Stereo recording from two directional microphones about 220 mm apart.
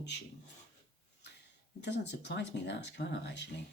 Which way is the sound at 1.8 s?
50° left (ahead or behind).